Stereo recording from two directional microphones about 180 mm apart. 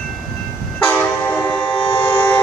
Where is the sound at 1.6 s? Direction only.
30° left (ahead or behind).